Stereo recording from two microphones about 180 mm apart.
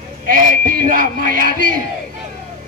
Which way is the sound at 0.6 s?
50° right (ahead or behind).